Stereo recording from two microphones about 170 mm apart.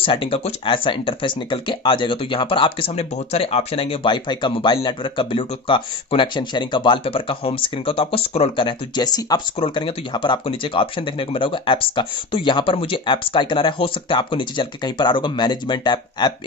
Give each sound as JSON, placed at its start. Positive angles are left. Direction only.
{"t": 0.0, "sound": "speech", "side_deg": 30}